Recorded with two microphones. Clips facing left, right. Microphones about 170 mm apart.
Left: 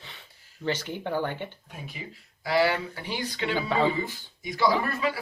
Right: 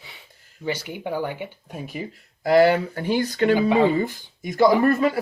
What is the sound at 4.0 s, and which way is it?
Speech, 50° right (ahead or behind).